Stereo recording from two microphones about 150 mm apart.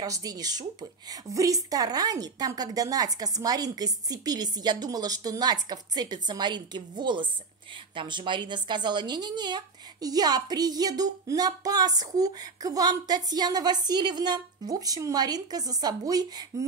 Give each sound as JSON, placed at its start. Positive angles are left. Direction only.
{"t": 0.0, "sound": "speech", "side_deg": -25}